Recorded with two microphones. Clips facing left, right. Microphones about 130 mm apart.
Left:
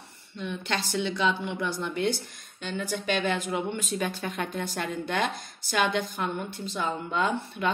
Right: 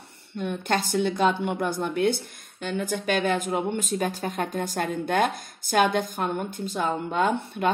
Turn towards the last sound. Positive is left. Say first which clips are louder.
# right 4 dB
turn(degrees=-50)  # may be behind; listen again after turning